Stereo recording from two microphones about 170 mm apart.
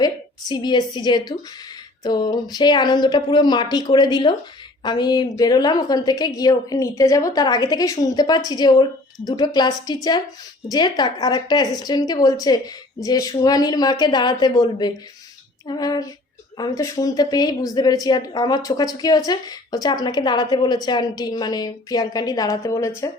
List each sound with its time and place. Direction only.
0.0 s speech: 25° left (ahead or behind)